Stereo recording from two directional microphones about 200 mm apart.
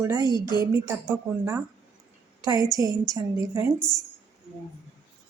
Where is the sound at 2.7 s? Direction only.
15° right (ahead or behind).